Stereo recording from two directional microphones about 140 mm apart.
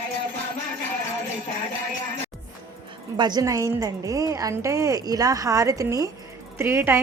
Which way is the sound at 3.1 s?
30° right (ahead or behind).